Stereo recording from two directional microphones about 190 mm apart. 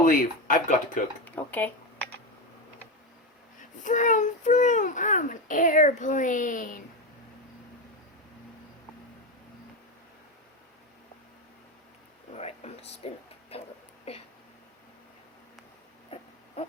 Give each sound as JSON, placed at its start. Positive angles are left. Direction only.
{"t": 0.0, "sound": "a child's voice", "side_deg": 45}
{"t": 1.2, "sound": "speech", "side_deg": 10}
{"t": 3.6, "sound": "a child's voice", "side_deg": 40}
{"t": 12.3, "sound": "a sound", "side_deg": 35}
{"t": 14.1, "sound": "speech", "side_deg": 35}